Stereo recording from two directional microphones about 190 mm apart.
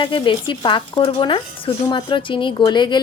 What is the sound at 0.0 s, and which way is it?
Speech, 25° left (ahead or behind).